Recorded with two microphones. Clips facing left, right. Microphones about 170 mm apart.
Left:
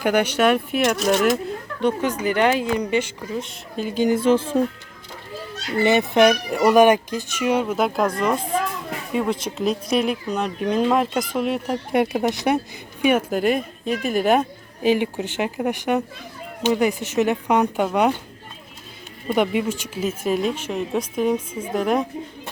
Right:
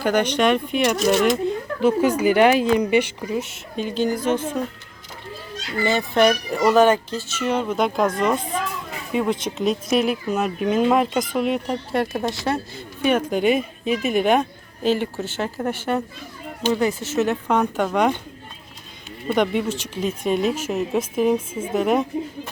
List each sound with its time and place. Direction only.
0.0 s speech: 10° left (ahead or behind)
2.0 s speech: 10° right (ahead or behind)
3.8 s a woman's voice: 10° left (ahead or behind)
4.1 s speech: 30° left (ahead or behind)
5.7 s a woman's voice: 20° left (ahead or behind); by 11.8 s 5° left (ahead or behind)
11.9 s a woman's voice: 20° left (ahead or behind)
19.3 s speech: 10° left (ahead or behind)